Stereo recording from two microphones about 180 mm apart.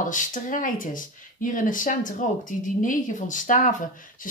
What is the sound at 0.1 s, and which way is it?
Speech, 45° left (ahead or behind).